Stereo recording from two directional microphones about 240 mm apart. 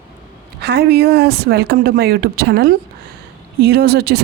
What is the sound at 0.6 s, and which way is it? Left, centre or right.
A woman's voice, right.